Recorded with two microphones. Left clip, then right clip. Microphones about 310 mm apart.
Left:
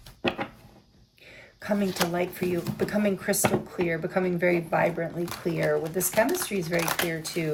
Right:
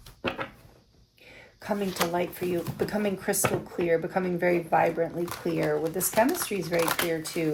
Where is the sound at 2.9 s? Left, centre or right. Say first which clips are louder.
Left 4 dB; centre.